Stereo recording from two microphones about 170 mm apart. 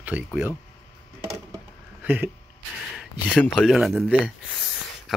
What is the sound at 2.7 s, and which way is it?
Speech, centre (ahead or behind).